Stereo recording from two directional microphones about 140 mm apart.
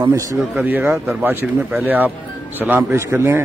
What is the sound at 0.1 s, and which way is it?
Speech, 25° right (ahead or behind).